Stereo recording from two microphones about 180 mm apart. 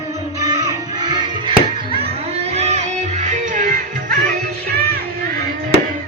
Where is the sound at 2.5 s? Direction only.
40° right (ahead or behind).